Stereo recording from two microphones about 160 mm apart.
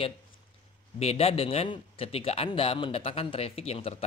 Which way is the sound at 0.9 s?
40° left (ahead or behind).